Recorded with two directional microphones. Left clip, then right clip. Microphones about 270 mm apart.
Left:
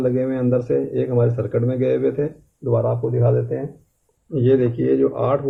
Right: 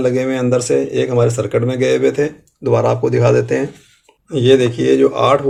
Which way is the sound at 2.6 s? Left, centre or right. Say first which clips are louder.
Right 6 dB; right.